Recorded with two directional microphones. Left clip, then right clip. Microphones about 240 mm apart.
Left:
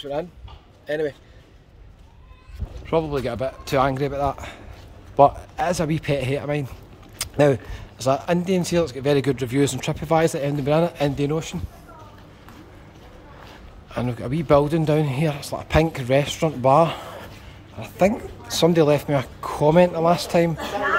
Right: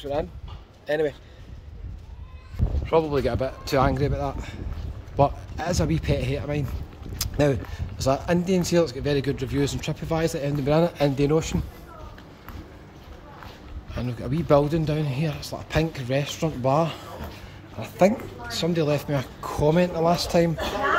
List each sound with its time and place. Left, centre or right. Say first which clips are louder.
0.0 s speech: even; centre
2.8 s speech: right 1 dB; centre
13.9 s speech: left 4 dB; centre
18.5 s speech: left 7 dB; centre